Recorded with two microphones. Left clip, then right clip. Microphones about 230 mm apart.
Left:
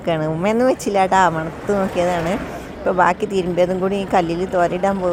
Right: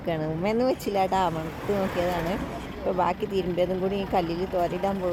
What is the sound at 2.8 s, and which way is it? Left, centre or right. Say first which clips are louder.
Speech: left 10 dB; centre.